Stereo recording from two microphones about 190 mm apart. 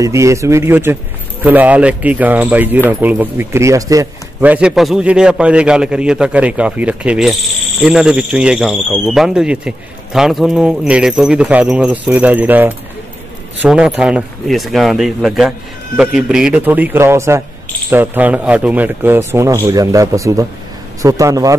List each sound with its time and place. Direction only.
0.0 s speech: 15° right (ahead or behind)